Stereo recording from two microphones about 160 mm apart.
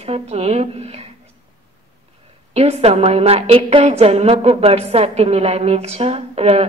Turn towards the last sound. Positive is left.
turn(degrees=-40)  # may be behind; listen again after turning